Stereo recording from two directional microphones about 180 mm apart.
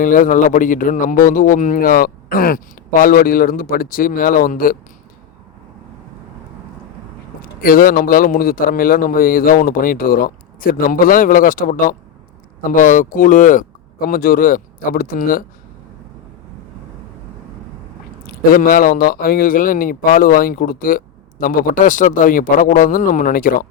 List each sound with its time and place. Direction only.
0.0 s speech: 50° left (ahead or behind)
7.6 s speech: 55° left (ahead or behind)
18.5 s speech: 50° left (ahead or behind)